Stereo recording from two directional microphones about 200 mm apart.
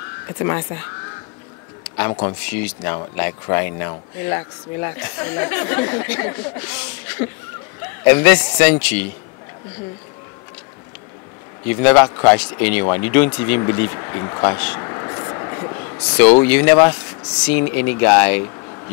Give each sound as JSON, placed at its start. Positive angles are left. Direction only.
{"t": 0.4, "sound": "speech", "side_deg": 15}
{"t": 2.5, "sound": "speech", "side_deg": 15}
{"t": 11.6, "sound": "speech", "side_deg": 10}
{"t": 13.3, "sound": "vehicle", "side_deg": 15}
{"t": 16.2, "sound": "speech", "side_deg": 10}